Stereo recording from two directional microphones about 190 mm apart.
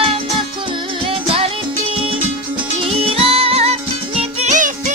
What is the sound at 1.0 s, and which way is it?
Music, 30° right (ahead or behind).